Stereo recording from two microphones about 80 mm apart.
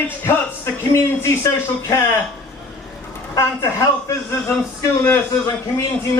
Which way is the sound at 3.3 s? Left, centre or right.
Left.